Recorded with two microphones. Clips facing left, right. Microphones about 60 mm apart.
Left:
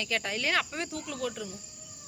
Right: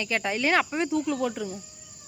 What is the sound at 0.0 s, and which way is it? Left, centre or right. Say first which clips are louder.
Cricket: right 5 dB; right.